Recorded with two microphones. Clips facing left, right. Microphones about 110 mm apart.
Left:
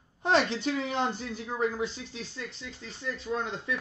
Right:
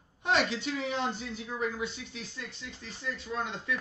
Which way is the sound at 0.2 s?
35° left (ahead or behind).